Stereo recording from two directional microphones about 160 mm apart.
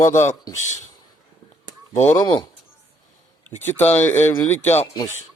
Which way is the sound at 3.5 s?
15° left (ahead or behind).